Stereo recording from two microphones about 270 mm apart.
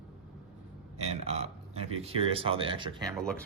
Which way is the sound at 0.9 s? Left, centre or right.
Right.